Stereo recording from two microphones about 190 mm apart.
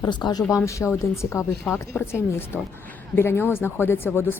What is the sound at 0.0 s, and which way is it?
Speech, 20° left (ahead or behind).